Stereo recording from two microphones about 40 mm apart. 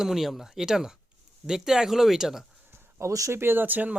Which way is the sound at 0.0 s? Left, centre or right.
Centre.